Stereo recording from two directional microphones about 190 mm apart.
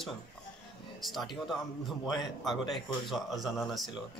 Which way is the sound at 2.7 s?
Centre (ahead or behind).